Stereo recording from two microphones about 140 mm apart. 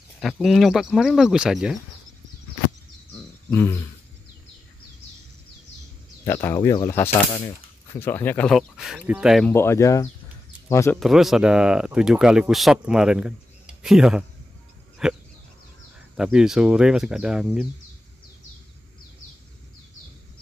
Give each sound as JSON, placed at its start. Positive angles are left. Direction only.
{"t": 0.2, "sound": "speech", "side_deg": 0}
{"t": 3.4, "sound": "speech", "side_deg": 15}
{"t": 6.2, "sound": "speech", "side_deg": 20}
{"t": 8.5, "sound": "speech", "side_deg": -5}
{"t": 9.5, "sound": "speech", "side_deg": 15}
{"t": 11.0, "sound": "speech", "side_deg": 0}
{"t": 16.2, "sound": "speech", "side_deg": -5}